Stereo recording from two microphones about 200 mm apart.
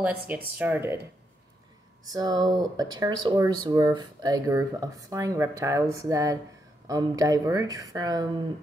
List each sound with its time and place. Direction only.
0.0 s speech: 5° right (ahead or behind)
2.0 s speech: 20° right (ahead or behind)